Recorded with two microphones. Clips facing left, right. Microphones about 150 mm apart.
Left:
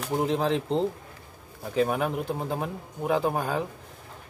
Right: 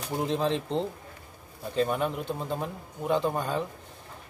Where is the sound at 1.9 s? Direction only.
60° left (ahead or behind).